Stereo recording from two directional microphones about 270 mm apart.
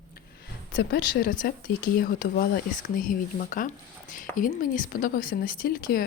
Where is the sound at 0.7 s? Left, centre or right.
Left.